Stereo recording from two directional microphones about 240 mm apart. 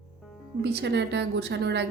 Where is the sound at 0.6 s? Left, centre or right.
Right.